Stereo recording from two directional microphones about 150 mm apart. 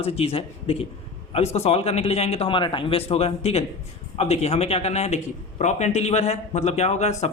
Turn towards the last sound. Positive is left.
turn(degrees=50)  # may be behind; listen again after turning